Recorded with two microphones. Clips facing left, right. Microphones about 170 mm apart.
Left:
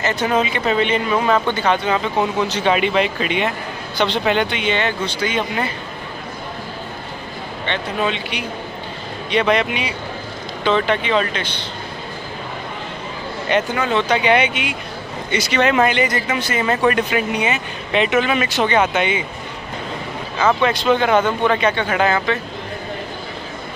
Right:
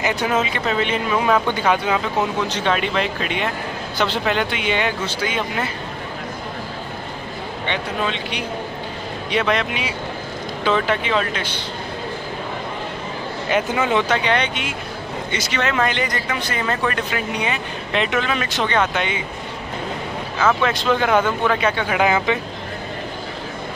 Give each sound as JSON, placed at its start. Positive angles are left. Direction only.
{"t": 0.0, "sound": "speech", "side_deg": -10}
{"t": 2.6, "sound": "speech", "side_deg": 5}
{"t": 9.3, "sound": "speech", "side_deg": 0}
{"t": 13.7, "sound": "speech", "side_deg": -15}
{"t": 14.2, "sound": "speech", "side_deg": 10}
{"t": 15.3, "sound": "speech", "side_deg": 15}
{"t": 15.9, "sound": "speech", "side_deg": 5}
{"t": 17.4, "sound": "speech", "side_deg": 5}
{"t": 20.6, "sound": "speech", "side_deg": 0}